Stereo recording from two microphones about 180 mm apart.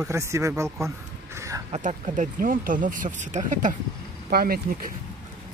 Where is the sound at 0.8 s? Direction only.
15° right (ahead or behind).